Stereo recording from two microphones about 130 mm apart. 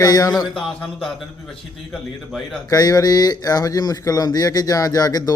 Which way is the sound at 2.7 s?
30° left (ahead or behind).